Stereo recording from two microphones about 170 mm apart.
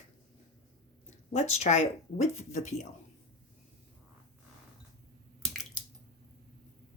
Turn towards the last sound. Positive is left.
turn(degrees=0)  # may be behind; listen again after turning